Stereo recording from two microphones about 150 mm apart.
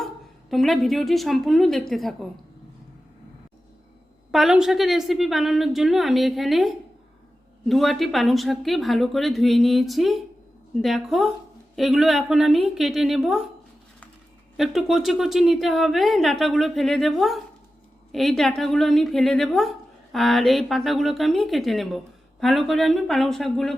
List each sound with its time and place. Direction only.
0.5 s speech: centre (ahead or behind)
4.3 s speech: 5° right (ahead or behind)
14.5 s speech: centre (ahead or behind)